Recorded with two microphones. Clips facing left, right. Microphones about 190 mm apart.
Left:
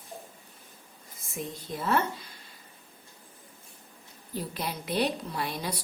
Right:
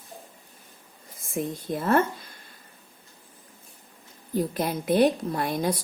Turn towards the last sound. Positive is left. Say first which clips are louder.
# right 7 dB
turn(degrees=-50)  # may be behind; listen again after turning